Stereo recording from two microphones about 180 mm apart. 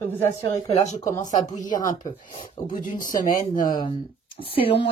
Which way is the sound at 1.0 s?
20° left (ahead or behind).